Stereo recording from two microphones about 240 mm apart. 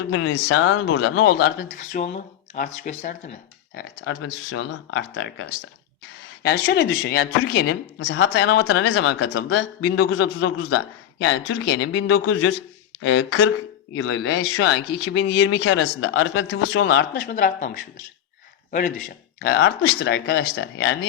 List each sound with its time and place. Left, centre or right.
0.1 s speech: left
1.4 s speech: left
3.8 s speech: left
6.4 s speech: left
10.0 s speech: left
12.1 s speech: left
14.6 s speech: left
17.2 s speech: left